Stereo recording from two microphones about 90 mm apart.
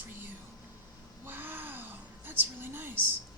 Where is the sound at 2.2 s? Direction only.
25° right (ahead or behind).